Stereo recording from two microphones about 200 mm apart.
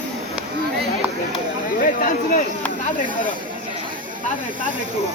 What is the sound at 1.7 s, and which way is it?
Speech, 45° left (ahead or behind).